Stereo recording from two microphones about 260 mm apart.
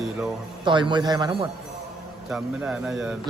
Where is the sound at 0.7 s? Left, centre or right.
Centre.